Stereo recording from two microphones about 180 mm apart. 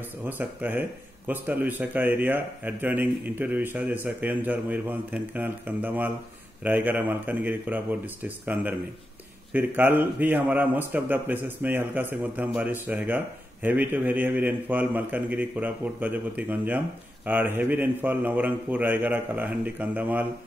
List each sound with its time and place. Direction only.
0.3 s a man's voice: 10° right (ahead or behind)